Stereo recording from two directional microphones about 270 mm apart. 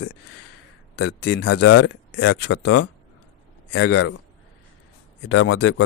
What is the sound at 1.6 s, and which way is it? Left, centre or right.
Speech, left.